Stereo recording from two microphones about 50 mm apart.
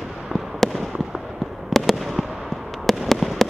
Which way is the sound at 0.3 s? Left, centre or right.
Centre.